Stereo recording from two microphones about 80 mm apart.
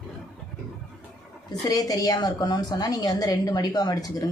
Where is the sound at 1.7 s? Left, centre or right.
Left.